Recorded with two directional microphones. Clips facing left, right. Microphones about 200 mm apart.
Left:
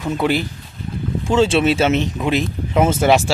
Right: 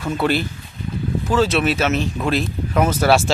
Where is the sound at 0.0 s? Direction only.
15° left (ahead or behind).